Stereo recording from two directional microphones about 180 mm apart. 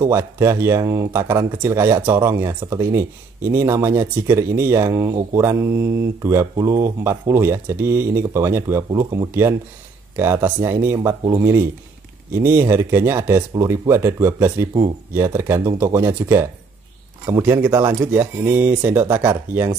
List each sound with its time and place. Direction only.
0.0 s speech: 15° right (ahead or behind)